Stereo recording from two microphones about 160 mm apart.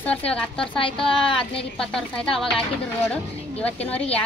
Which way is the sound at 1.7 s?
5° left (ahead or behind).